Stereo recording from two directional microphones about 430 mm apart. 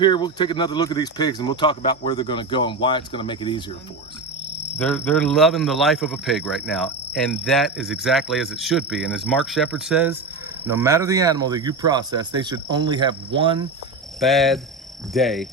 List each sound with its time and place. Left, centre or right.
0.0 s speech: centre
4.8 s speech: centre
14.2 s speech: centre